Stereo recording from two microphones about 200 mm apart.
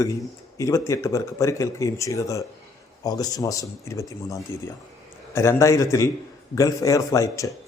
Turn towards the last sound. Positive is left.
turn(degrees=15)  # may be behind; listen again after turning